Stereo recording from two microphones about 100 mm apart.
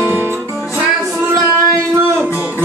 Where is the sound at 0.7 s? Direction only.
25° right (ahead or behind).